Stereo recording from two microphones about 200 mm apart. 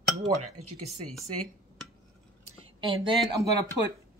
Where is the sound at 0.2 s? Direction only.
35° right (ahead or behind).